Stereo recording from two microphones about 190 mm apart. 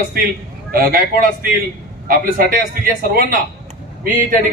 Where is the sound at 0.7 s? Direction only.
50° right (ahead or behind).